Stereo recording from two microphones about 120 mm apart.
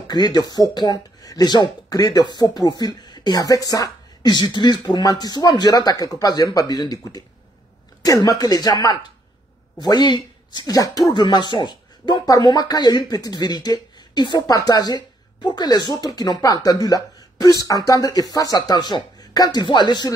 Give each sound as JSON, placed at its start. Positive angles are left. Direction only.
{"t": 0.1, "sound": "speech", "side_deg": 35}
{"t": 9.8, "sound": "speech", "side_deg": 35}